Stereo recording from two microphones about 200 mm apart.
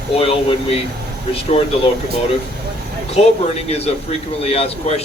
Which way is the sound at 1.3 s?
30° left (ahead or behind).